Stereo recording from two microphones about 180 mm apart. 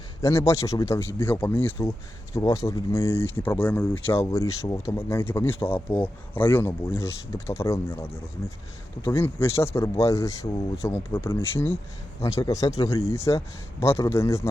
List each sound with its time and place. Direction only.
0.2 s a man's voice: 15° left (ahead or behind)